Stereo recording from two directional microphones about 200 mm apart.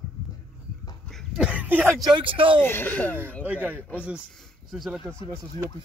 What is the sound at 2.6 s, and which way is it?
Speech, 10° left (ahead or behind).